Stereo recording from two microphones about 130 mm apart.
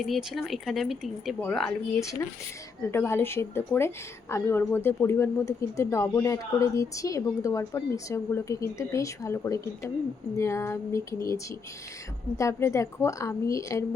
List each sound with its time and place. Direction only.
0.0 s speech: centre (ahead or behind)
2.0 s speech: 25° left (ahead or behind)
12.4 s speech: 20° left (ahead or behind)